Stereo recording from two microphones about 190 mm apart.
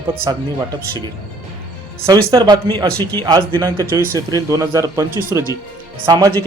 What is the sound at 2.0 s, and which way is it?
A man's voice, 20° right (ahead or behind).